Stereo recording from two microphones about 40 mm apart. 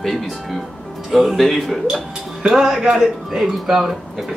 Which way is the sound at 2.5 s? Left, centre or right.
Centre.